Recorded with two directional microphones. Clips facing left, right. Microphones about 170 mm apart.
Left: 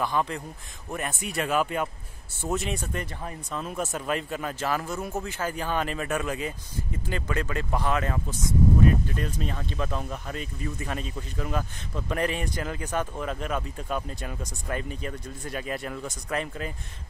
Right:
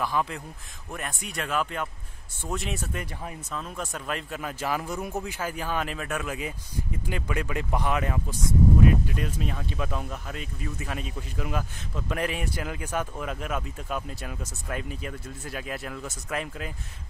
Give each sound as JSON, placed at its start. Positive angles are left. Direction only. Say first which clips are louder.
{"t": 0.0, "sound": "speech", "louder": "left 1 dB", "side_deg": -5}
{"t": 3.5, "sound": "speech", "louder": "left 5 dB", "side_deg": 5}